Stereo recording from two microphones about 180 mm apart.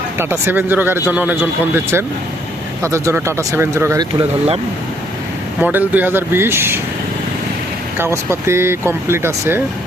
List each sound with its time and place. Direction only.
0.2 s speech: 10° right (ahead or behind)
5.5 s speech: 10° right (ahead or behind)
7.9 s speech: 15° right (ahead or behind)